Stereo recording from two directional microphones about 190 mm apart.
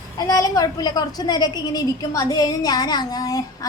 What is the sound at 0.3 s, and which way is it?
A woman's voice, 20° left (ahead or behind).